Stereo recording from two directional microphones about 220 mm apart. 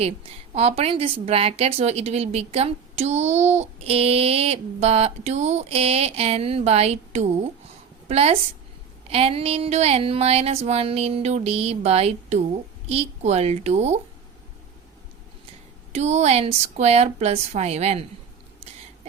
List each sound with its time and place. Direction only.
0.5 s a woman's voice: 30° right (ahead or behind)
15.9 s speech: 30° right (ahead or behind)